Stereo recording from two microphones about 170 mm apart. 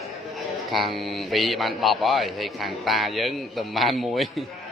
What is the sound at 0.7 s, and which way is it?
A man's voice, centre (ahead or behind).